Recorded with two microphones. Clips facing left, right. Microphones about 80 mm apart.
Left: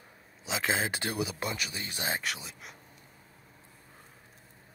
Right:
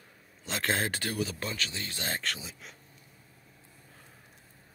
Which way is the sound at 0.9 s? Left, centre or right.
Centre.